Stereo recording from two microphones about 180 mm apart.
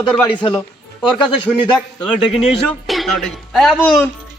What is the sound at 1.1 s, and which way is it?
Speech, centre (ahead or behind).